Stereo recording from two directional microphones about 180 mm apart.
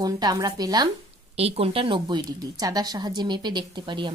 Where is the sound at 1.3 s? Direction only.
35° right (ahead or behind).